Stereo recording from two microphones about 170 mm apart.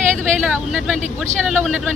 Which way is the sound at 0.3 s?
Centre (ahead or behind).